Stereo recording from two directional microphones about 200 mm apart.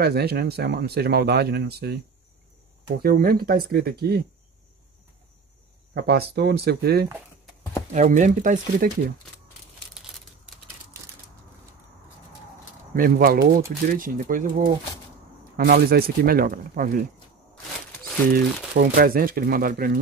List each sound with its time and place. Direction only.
0.0 s speech: 55° right (ahead or behind)
3.0 s speech: 50° right (ahead or behind)
5.9 s speech: 55° right (ahead or behind)
7.9 s speech: 40° right (ahead or behind)
10.1 s typewriter: 5° right (ahead or behind)
12.9 s speech: 45° right (ahead or behind)
18.3 s speech: 45° right (ahead or behind)